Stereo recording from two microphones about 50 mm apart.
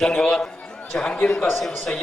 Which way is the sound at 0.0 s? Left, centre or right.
Centre.